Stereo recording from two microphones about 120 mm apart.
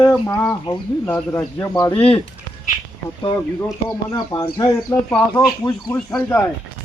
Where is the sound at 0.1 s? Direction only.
5° left (ahead or behind).